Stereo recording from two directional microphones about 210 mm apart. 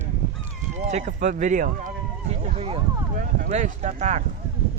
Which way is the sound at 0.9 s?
35° right (ahead or behind).